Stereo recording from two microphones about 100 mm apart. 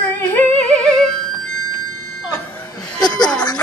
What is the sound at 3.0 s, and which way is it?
Chuckle, 45° left (ahead or behind).